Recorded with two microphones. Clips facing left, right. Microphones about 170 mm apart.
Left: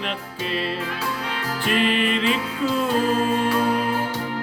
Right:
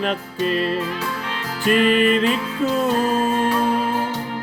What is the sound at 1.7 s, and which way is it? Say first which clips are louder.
Music: right 5 dB; 45° right (ahead or behind).